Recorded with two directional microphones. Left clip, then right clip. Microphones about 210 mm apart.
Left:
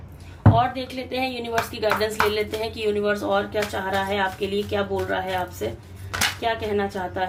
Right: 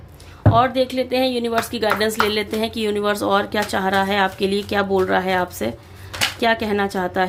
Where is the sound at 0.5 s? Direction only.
45° right (ahead or behind).